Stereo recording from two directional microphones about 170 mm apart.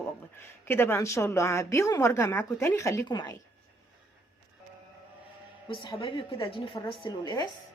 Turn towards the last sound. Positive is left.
turn(degrees=25)  # may be behind; listen again after turning